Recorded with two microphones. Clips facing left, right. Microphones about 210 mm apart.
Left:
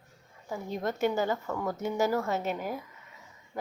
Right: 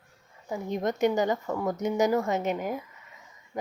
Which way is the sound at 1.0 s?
15° right (ahead or behind).